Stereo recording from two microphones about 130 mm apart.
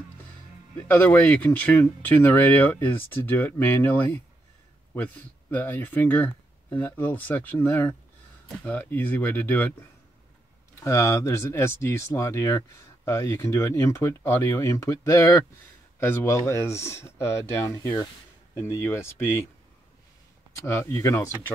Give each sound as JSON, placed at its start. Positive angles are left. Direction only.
{"t": 0.7, "sound": "speech", "side_deg": 15}
{"t": 20.5, "sound": "speech", "side_deg": 20}